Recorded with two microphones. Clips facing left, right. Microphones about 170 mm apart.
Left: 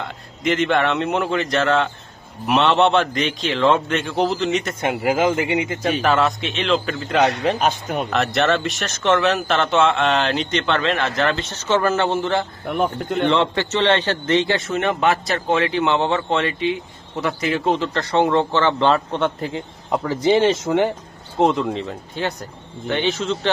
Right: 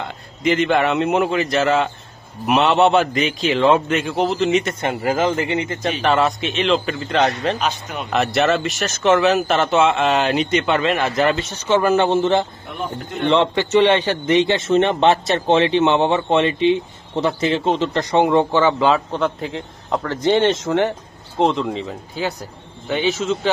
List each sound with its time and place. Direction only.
0.0 s a man's voice: centre (ahead or behind)
4.8 s a man's voice: 10° left (ahead or behind)
7.6 s speech: 45° left (ahead or behind)
8.1 s speech: 5° right (ahead or behind); by 12.4 s 20° right (ahead or behind)
12.6 s speech: 65° left (ahead or behind)
13.3 s a man's voice: 20° right (ahead or behind)